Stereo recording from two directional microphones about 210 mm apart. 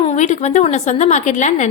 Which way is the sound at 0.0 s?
30° left (ahead or behind).